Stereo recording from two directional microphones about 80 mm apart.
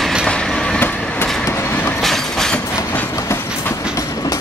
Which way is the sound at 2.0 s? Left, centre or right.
Centre.